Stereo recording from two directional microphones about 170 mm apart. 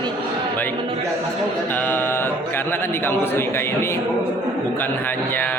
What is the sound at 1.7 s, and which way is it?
A man's voice, 10° left (ahead or behind).